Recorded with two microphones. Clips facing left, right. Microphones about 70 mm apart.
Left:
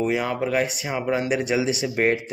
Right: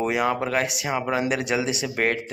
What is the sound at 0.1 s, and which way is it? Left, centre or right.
Speech, centre.